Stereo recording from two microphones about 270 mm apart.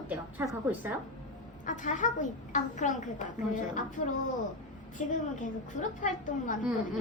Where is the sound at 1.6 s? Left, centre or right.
Left.